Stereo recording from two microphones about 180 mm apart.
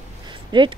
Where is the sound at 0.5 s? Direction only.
25° right (ahead or behind).